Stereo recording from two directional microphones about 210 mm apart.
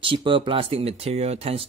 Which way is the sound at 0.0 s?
25° right (ahead or behind).